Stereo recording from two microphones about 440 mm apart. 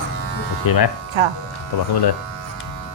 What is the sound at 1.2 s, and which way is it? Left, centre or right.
Speech, right.